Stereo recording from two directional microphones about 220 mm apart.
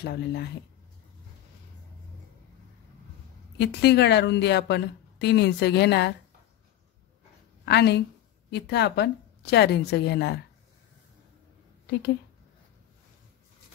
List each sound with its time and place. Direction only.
0.0 s a woman's voice: 50° left (ahead or behind)
3.5 s a woman's voice: 50° left (ahead or behind)
7.6 s a woman's voice: 50° left (ahead or behind)